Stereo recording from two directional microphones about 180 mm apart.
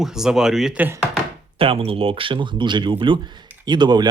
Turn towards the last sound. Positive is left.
turn(degrees=-25)  # may be behind; listen again after turning